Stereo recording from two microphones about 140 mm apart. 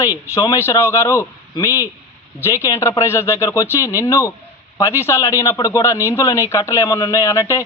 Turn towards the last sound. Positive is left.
turn(degrees=25)  # may be behind; listen again after turning